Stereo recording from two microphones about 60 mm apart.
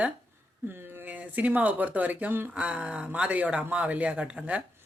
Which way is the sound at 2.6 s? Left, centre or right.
Centre.